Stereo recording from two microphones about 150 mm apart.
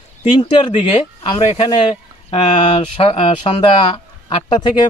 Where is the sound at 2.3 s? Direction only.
35° left (ahead or behind).